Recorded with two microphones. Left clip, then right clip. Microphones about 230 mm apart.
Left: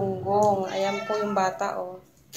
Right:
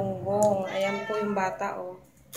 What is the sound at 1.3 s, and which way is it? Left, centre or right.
Speech, centre.